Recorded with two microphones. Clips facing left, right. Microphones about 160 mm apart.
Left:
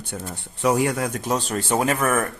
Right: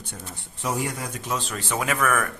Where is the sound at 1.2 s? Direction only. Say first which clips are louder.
Left 6 dB; 40° left (ahead or behind).